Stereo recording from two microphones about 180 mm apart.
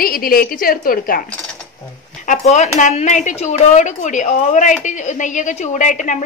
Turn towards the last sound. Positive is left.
turn(degrees=45)  # may be behind; listen again after turning